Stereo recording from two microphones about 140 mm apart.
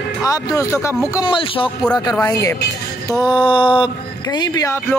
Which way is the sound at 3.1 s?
30° left (ahead or behind).